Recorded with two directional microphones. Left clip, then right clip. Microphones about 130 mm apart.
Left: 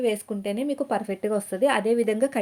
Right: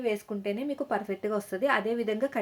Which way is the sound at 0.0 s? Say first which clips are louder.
Left 5 dB; 60° left (ahead or behind).